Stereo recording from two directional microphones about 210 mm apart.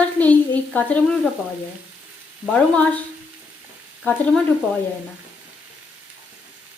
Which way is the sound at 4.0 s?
5° left (ahead or behind).